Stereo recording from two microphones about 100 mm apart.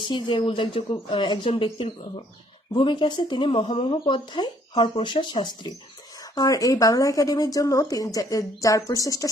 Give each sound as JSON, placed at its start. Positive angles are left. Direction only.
{"t": 0.1, "sound": "speech", "side_deg": 55}
{"t": 4.0, "sound": "speech", "side_deg": 50}